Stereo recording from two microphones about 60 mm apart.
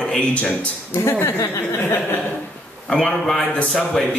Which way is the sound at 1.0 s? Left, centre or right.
Left.